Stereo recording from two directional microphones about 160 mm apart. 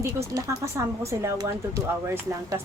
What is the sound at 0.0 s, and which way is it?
Speech, 15° right (ahead or behind).